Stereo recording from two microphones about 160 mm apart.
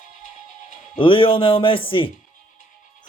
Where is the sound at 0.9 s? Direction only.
30° left (ahead or behind).